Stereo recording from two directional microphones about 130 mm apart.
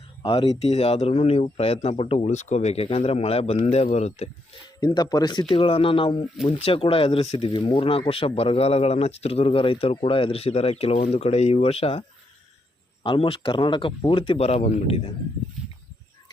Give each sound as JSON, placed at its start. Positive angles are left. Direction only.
{"t": 0.2, "sound": "speech", "side_deg": 45}
{"t": 2.1, "sound": "a man's voice", "side_deg": 60}
{"t": 4.8, "sound": "speech", "side_deg": 30}
{"t": 7.5, "sound": "speech", "side_deg": 40}